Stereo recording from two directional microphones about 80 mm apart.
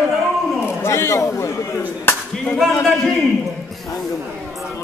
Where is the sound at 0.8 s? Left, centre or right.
Left.